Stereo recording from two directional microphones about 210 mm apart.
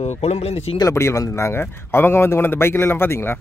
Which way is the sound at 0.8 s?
15° left (ahead or behind).